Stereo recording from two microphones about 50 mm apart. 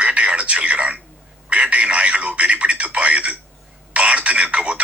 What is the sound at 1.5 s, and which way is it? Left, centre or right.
Radio, right.